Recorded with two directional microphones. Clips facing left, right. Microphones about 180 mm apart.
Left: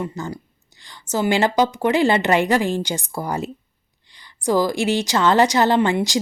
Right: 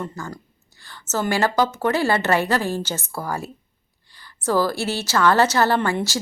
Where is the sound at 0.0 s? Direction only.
15° left (ahead or behind).